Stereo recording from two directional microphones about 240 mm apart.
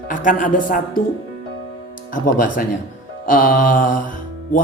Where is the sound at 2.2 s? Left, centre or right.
Left.